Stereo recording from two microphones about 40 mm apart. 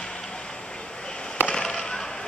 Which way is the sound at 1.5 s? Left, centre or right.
Centre.